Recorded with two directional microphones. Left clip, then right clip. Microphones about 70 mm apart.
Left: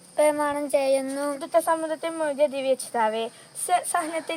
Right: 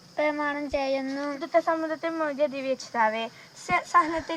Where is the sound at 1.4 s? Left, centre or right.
Left.